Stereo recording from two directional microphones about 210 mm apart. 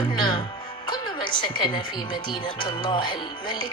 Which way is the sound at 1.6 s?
20° left (ahead or behind).